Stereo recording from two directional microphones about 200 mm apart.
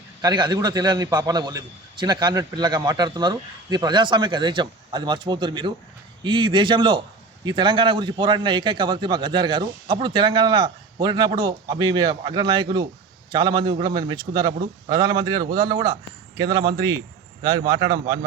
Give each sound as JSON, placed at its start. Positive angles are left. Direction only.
{"t": 0.2, "sound": "a man's voice", "side_deg": -20}